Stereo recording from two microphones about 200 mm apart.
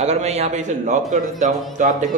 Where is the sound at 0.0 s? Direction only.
35° right (ahead or behind).